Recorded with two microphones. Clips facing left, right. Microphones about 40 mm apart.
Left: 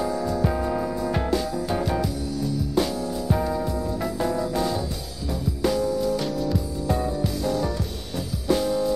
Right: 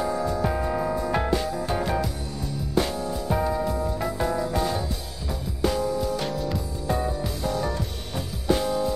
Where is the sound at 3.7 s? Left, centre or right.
Right.